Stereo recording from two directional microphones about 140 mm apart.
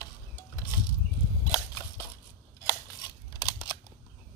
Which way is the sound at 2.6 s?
25° left (ahead or behind).